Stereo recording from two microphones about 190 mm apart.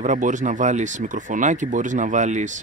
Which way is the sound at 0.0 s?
40° right (ahead or behind).